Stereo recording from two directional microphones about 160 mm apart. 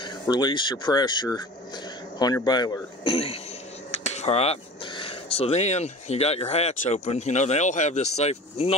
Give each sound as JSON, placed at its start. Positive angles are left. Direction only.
{"t": 0.0, "sound": "speech", "side_deg": 25}